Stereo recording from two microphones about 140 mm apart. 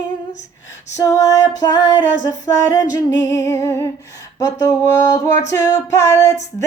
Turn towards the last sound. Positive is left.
turn(degrees=25)  # may be behind; listen again after turning